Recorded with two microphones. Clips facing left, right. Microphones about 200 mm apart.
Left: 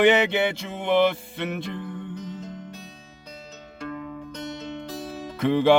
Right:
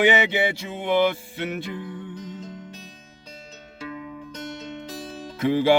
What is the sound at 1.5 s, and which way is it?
Mantra, 5° right (ahead or behind).